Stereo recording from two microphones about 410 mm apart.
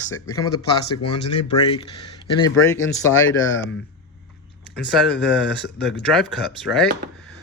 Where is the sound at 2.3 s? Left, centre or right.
Centre.